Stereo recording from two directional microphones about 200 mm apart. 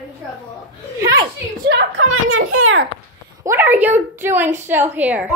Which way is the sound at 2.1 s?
90° right.